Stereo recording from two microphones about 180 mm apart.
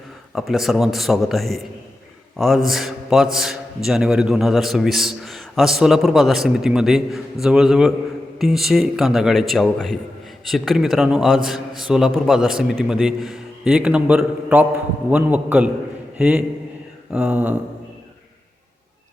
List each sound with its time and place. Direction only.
0.3 s a man's voice: centre (ahead or behind)